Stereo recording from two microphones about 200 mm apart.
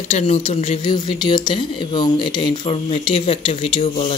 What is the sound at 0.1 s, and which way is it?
Speech, 30° left (ahead or behind).